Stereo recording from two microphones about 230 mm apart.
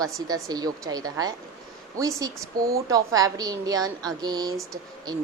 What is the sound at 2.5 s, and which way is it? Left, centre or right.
Speech, right.